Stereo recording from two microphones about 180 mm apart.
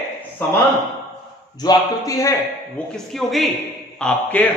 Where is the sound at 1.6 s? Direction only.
20° left (ahead or behind).